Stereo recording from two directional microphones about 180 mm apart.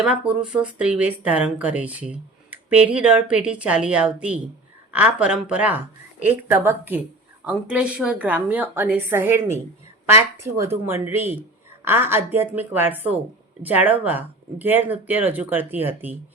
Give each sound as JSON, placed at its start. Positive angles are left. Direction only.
{"t": 0.0, "sound": "speech", "side_deg": -5}